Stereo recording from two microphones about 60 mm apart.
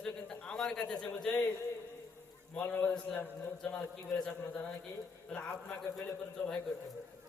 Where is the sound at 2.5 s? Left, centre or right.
Left.